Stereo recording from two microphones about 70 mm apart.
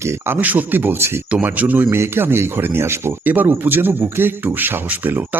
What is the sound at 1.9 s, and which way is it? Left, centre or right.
Speech, right.